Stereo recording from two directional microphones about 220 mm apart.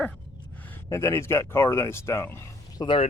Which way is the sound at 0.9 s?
10° left (ahead or behind).